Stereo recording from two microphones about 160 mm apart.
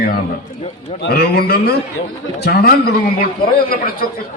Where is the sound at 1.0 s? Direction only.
80° left.